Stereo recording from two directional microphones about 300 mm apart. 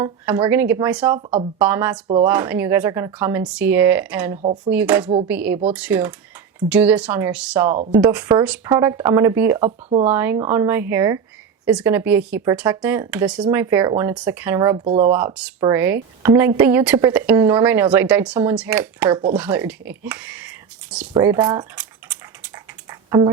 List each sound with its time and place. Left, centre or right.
0.0 s speech: centre
9.6 s speech: right
10.1 s speech: centre
22.9 s typing: centre